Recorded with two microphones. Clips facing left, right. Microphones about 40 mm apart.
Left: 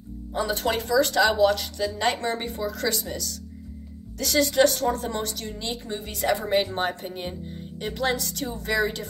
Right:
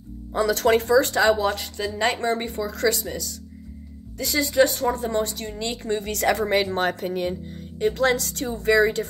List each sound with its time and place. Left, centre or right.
0.3 s speech: right
0.7 s speech: right
4.2 s speech: right
5.4 s speech: right
5.9 s a woman's voice: right
6.8 s speech: right
7.8 s speech: right